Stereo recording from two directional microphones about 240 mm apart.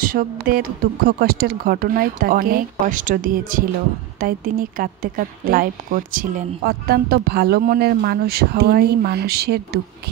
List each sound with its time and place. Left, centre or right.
0.0 s a woman's voice: right